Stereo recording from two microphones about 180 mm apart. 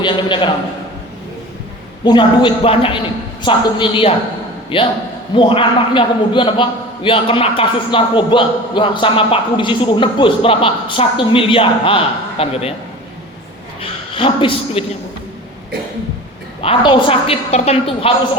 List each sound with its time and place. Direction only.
0.0 s a man's voice: 25° left (ahead or behind)
2.0 s a man's voice: 25° left (ahead or behind)
13.8 s a sound: 30° left (ahead or behind)
16.6 s a woman's voice: 30° left (ahead or behind)